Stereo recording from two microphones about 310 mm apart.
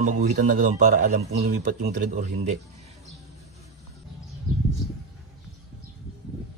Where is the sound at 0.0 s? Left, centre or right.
Right.